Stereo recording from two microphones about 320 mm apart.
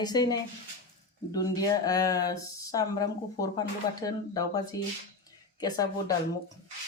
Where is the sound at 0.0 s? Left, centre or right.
Centre.